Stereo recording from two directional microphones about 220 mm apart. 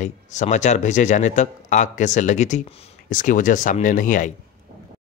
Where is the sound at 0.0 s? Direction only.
35° left (ahead or behind).